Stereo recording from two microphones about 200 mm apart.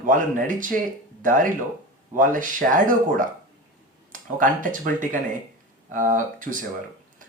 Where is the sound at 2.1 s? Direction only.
40° right (ahead or behind).